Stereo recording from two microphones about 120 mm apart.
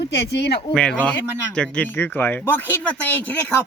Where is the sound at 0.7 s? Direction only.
10° left (ahead or behind).